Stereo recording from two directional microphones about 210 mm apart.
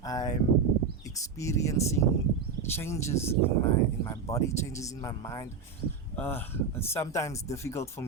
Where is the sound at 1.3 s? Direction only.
15° left (ahead or behind).